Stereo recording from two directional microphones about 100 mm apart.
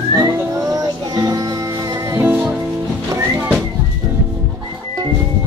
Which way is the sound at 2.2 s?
15° right (ahead or behind).